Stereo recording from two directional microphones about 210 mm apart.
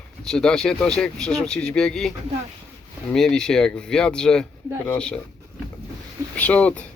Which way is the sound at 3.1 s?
5° left (ahead or behind).